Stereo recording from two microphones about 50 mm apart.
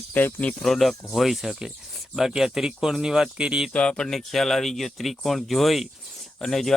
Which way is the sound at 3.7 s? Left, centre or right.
Centre.